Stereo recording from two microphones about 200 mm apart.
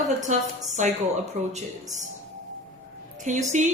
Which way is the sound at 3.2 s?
35° right (ahead or behind).